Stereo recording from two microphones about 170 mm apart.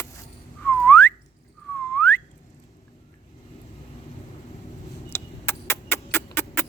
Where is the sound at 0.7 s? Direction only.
10° left (ahead or behind).